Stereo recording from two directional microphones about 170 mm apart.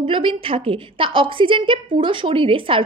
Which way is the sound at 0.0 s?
30° right (ahead or behind).